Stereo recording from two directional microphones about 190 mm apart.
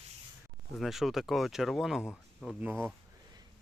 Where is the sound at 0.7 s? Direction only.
Centre (ahead or behind).